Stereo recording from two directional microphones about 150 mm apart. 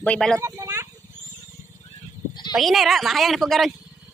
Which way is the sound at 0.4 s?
20° right (ahead or behind).